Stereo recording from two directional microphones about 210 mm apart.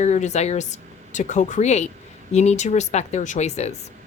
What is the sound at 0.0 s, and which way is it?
A woman's voice, 35° left (ahead or behind).